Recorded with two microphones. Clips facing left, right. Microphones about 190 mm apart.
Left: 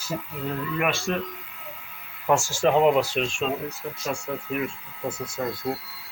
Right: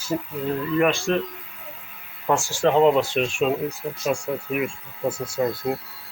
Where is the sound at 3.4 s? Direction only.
10° right (ahead or behind).